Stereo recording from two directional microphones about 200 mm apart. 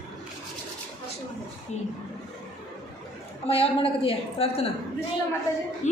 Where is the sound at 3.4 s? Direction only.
30° left (ahead or behind).